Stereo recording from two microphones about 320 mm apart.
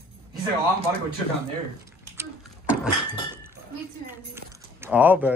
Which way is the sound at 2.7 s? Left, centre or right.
Centre.